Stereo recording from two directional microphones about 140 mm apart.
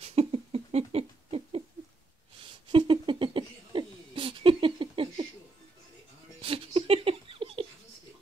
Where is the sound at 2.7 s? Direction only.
35° right (ahead or behind).